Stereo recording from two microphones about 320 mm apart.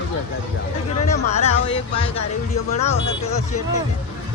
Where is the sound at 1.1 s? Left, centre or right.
Centre.